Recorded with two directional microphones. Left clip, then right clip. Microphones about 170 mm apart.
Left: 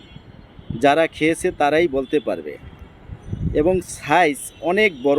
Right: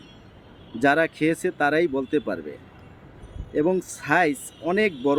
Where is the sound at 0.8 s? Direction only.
10° left (ahead or behind).